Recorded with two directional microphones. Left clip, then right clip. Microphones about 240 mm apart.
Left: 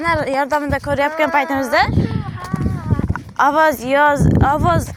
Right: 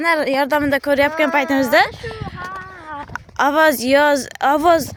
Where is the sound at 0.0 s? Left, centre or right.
Centre.